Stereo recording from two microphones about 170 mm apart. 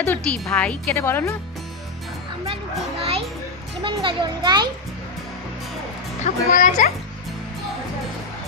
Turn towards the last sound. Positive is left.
turn(degrees=50)  # may be behind; listen again after turning